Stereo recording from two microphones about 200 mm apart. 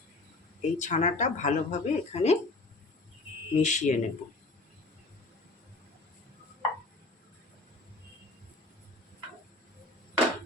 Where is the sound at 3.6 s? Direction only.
35° left (ahead or behind).